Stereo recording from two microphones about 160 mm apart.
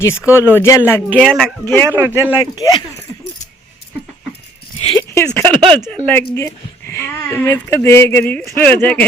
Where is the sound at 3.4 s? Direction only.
50° left (ahead or behind).